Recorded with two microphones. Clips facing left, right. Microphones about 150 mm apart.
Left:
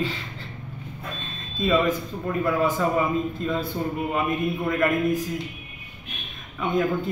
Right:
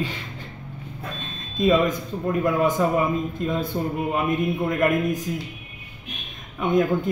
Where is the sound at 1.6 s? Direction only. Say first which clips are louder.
Right 2 dB; 15° right (ahead or behind).